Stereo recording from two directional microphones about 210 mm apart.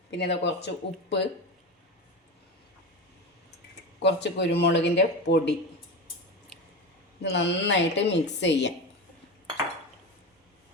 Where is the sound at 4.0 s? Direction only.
55° left (ahead or behind).